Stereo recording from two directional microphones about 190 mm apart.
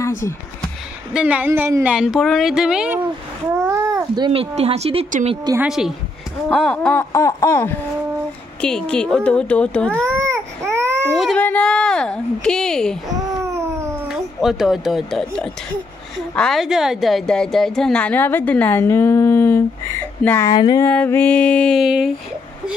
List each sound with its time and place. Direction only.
1.1 s a woman's voice: 5° right (ahead or behind)
3.6 s speech: 15° right (ahead or behind)
5.7 s a woman's voice: centre (ahead or behind)
9.9 s baby cry: 15° right (ahead or behind)
11.1 s a sound: 5° left (ahead or behind)
13.2 s a sound: 15° right (ahead or behind)
14.0 s a woman's voice: centre (ahead or behind); by 20.9 s 20° left (ahead or behind)
20.9 s speech: 10° left (ahead or behind)